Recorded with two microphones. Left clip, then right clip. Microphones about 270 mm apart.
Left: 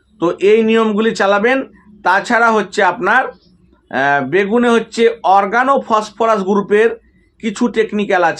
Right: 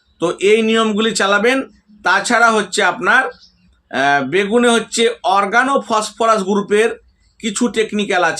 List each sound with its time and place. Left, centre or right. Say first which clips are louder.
0.2 s speech: left 2 dB; centre